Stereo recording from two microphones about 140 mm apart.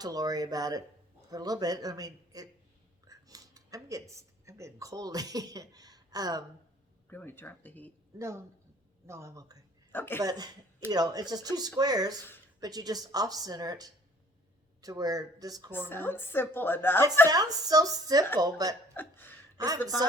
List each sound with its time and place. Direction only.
0.0 s speech: 25° right (ahead or behind)
7.1 s a woman's voice: 15° left (ahead or behind)
8.2 s speech: 20° right (ahead or behind)
9.9 s speech: 15° left (ahead or behind)
10.2 s speech: 25° right (ahead or behind)
15.9 s a woman's voice: 15° left (ahead or behind)
17.2 s speech: 25° right (ahead or behind)
18.9 s speech: 15° left (ahead or behind)
19.5 s a woman's voice: 25° right (ahead or behind)